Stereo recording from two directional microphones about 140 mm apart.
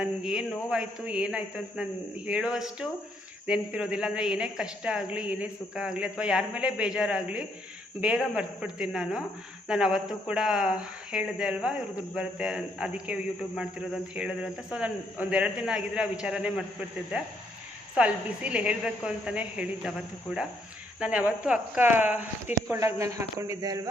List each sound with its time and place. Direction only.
0.0 s a woman's voice: 5° right (ahead or behind)
17.9 s a woman's voice: 10° right (ahead or behind)
21.0 s a woman's voice: 10° right (ahead or behind); by 23.9 s 25° right (ahead or behind)